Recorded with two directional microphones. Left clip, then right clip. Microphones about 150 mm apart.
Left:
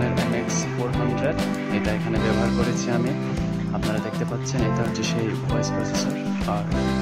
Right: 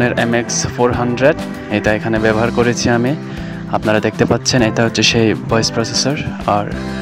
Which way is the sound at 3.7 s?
85° right.